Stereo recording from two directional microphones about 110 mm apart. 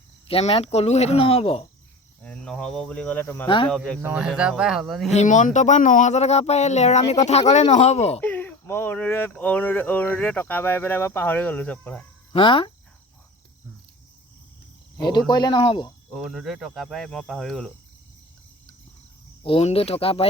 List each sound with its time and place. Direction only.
0.3 s speech: 60° left (ahead or behind)
2.2 s speech: 10° left (ahead or behind)
3.4 s speech: 50° left (ahead or behind)
4.0 s speech: 10° right (ahead or behind)
5.1 s speech: 90° left
8.2 s speech: 15° left (ahead or behind)
12.3 s speech: 50° left (ahead or behind)
14.9 s speech: 40° left (ahead or behind)
15.6 s speech: 50° left (ahead or behind)
16.1 s speech: centre (ahead or behind)
19.4 s speech: 55° left (ahead or behind)
19.6 s speech: 65° left (ahead or behind)